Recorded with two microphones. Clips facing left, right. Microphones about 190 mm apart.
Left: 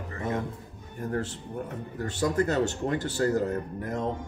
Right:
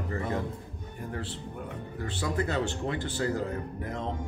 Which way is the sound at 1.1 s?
45° left (ahead or behind).